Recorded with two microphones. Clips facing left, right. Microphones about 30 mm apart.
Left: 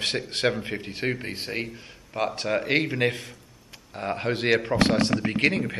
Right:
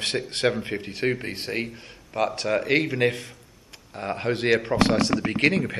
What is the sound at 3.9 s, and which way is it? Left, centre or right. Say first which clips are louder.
Speech: right 1 dB; centre.